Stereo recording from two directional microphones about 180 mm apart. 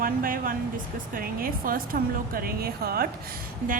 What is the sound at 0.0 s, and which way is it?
A woman's voice, 50° right (ahead or behind).